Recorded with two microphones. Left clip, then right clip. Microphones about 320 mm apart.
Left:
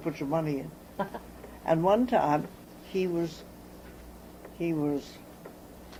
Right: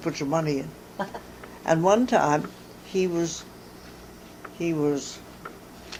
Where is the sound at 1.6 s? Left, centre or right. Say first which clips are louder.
Right 4 dB; right.